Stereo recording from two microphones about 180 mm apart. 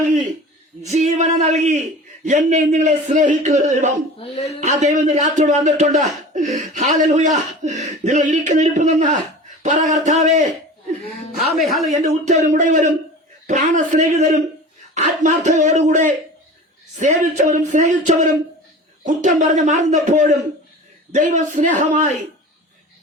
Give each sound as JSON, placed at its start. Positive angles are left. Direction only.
{"t": 0.8, "sound": "speech", "side_deg": -40}
{"t": 4.2, "sound": "speech", "side_deg": 35}
{"t": 4.8, "sound": "speech", "side_deg": -40}
{"t": 11.5, "sound": "speech", "side_deg": 0}
{"t": 11.9, "sound": "speech", "side_deg": -40}